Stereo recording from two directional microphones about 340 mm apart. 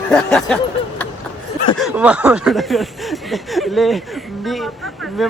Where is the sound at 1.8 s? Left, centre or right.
Centre.